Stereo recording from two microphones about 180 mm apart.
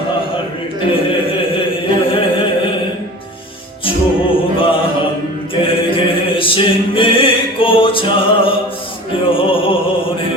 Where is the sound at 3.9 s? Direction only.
30° left (ahead or behind).